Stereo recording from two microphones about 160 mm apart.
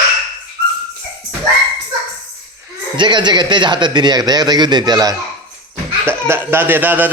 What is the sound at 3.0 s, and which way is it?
A man's voice, 30° right (ahead or behind).